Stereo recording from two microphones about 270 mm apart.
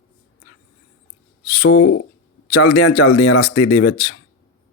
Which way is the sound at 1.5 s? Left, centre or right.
Left.